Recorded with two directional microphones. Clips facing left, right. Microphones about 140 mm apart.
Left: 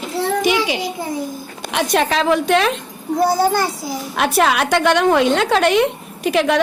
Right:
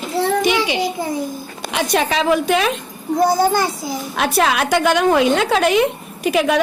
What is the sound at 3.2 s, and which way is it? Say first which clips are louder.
Speech: right 1 dB; 15° right (ahead or behind).